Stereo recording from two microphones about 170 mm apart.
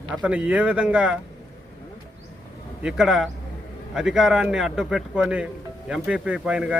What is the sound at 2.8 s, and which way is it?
A man's voice, 5° right (ahead or behind).